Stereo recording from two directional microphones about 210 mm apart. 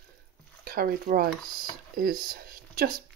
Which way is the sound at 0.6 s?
45° right (ahead or behind).